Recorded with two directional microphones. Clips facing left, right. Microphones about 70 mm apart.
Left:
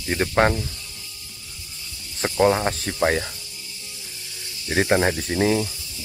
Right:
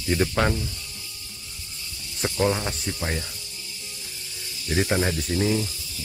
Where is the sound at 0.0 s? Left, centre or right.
Left.